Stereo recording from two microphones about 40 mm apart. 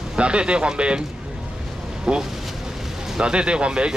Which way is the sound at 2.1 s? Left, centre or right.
Right.